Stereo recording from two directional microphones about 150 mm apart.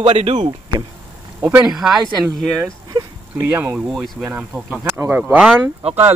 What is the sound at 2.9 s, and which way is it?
Dog, 25° right (ahead or behind).